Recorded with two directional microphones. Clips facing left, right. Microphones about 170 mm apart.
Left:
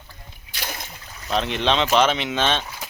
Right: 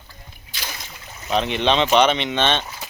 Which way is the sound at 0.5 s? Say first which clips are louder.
Left 2 dB; 60° left (ahead or behind).